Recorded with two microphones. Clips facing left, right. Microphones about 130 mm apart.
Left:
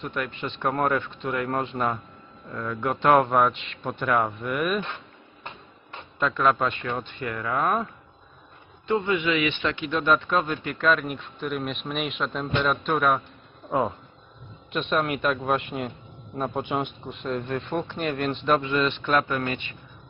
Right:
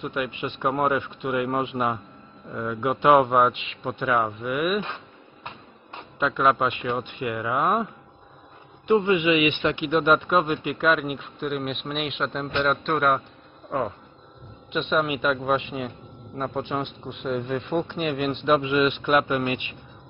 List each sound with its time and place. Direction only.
0.0 s a man's voice: 5° right (ahead or behind)
6.1 s a man's voice: 5° right (ahead or behind); by 7.7 s 20° right (ahead or behind)
8.8 s a man's voice: 20° right (ahead or behind)
10.2 s a man's voice: 10° right (ahead or behind)